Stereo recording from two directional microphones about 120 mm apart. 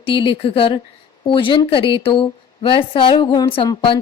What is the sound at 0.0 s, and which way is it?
Speech, 45° left (ahead or behind).